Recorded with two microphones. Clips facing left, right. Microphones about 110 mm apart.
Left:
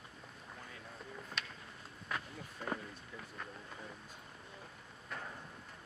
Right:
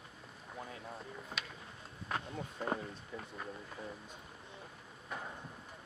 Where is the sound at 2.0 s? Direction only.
30° right (ahead or behind).